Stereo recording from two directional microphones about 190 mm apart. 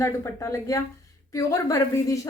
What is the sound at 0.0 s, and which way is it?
A woman's voice, 15° left (ahead or behind).